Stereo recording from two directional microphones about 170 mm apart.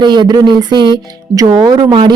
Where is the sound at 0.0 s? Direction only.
25° right (ahead or behind).